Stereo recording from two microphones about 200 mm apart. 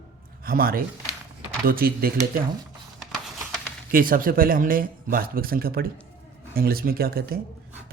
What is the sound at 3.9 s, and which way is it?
Speech, 45° right (ahead or behind).